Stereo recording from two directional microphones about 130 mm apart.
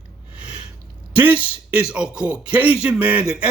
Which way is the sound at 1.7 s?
5° right (ahead or behind).